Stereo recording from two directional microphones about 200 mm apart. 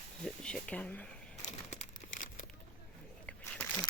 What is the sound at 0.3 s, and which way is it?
Speech, 5° left (ahead or behind).